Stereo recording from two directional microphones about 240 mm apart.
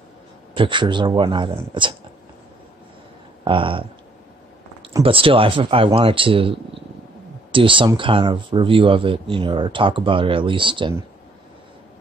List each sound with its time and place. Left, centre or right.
0.6 s speech: centre
3.4 s speech: right
4.9 s speech: right